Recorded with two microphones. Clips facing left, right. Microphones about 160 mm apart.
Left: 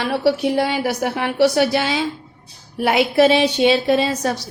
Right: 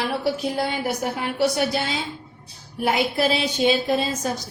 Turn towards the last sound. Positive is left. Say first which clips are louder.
# left 5 dB
turn(degrees=70)  # may be behind; listen again after turning